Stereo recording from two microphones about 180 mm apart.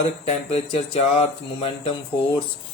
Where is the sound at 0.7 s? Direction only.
30° left (ahead or behind).